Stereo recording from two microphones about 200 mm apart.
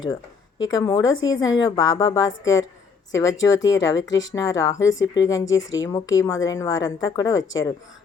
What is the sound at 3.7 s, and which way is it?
Speech, 65° left (ahead or behind).